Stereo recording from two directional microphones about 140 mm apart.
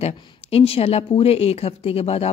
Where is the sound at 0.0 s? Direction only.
45° left (ahead or behind).